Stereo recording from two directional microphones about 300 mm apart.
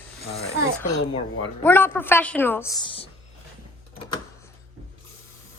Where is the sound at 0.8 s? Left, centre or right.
Centre.